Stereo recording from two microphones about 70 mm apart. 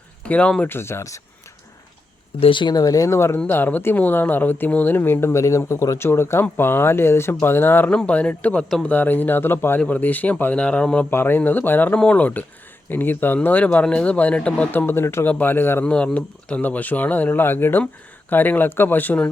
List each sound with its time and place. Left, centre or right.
0.3 s speech: centre
0.7 s speech: left
2.6 s speech: left
3.1 s speech: left
5.3 s speech: left
6.0 s speech: left
7.9 s speech: centre
11.1 s speech: left
14.7 s speech: left
15.8 s speech: centre